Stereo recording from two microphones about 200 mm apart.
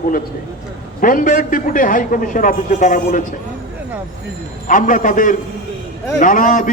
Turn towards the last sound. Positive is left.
turn(degrees=40)  # may be behind; listen again after turning